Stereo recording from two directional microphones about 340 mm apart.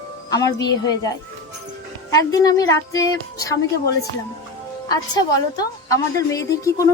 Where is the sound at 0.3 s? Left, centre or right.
Centre.